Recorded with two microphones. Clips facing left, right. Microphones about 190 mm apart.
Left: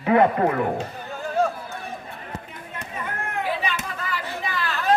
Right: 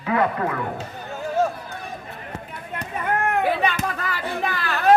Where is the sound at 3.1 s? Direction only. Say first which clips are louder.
Right 7 dB; 55° right (ahead or behind).